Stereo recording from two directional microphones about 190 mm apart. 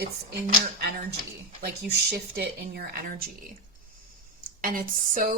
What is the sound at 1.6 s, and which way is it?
Speech, 55° right (ahead or behind).